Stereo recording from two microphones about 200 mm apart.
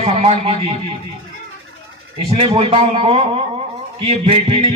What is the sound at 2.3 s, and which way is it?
A man's voice, 25° right (ahead or behind).